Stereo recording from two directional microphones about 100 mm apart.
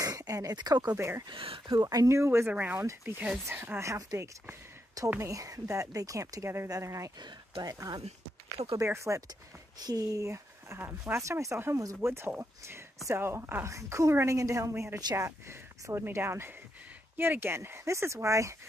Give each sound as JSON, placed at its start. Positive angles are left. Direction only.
{"t": 0.0, "sound": "a sound", "side_deg": -40}
{"t": 0.6, "sound": "speech", "side_deg": -45}
{"t": 0.9, "sound": "speech", "side_deg": -25}
{"t": 1.3, "sound": "speech", "side_deg": -60}
{"t": 1.8, "sound": "speech", "side_deg": -35}
{"t": 2.5, "sound": "speech", "side_deg": -15}
{"t": 2.8, "sound": "speech", "side_deg": -25}
{"t": 7.2, "sound": "speech", "side_deg": -45}
{"t": 8.7, "sound": "speech", "side_deg": -30}